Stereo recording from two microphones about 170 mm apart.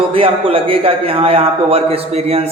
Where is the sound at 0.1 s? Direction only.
35° right (ahead or behind).